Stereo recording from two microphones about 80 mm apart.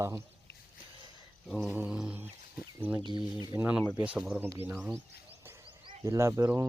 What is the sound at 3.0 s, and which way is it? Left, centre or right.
Speech, right.